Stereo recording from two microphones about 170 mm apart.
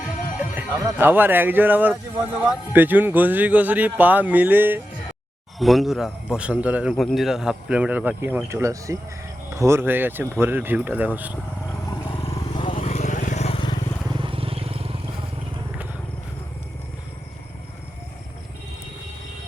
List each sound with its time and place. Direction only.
0.3 s speech: 10° right (ahead or behind)
5.5 s speech: centre (ahead or behind)
11.9 s vehicle: 30° left (ahead or behind)
12.8 s vehicle: 45° left (ahead or behind)
13.6 s vehicle: 25° left (ahead or behind)
14.1 s vehicle: 30° right (ahead or behind)